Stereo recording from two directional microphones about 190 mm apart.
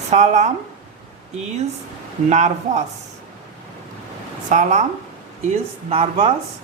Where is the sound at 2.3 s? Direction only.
40° right (ahead or behind).